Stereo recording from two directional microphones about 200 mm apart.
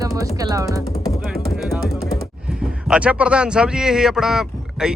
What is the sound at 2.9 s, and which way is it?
Speech, 5° right (ahead or behind).